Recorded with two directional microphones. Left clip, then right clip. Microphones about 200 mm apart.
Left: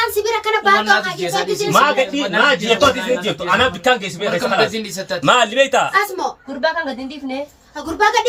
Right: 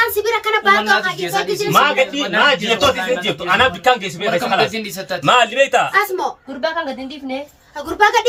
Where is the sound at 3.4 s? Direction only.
15° left (ahead or behind).